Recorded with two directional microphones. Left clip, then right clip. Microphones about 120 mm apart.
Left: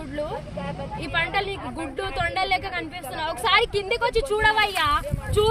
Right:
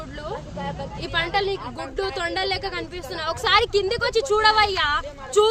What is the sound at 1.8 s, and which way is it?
Speech, 40° right (ahead or behind).